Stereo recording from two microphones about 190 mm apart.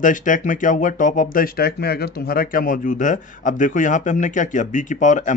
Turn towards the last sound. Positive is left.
turn(degrees=40)  # may be behind; listen again after turning